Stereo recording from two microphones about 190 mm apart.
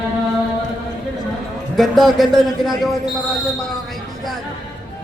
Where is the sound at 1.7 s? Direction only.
Centre (ahead or behind).